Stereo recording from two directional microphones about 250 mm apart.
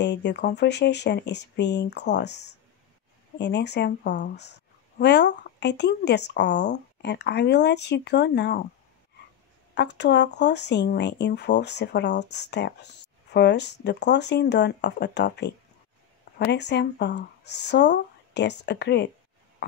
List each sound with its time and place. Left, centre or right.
0.0 s speech: left
9.8 s speech: left